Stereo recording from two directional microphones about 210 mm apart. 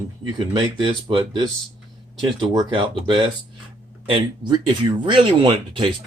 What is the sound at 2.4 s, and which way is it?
Speech, 20° right (ahead or behind).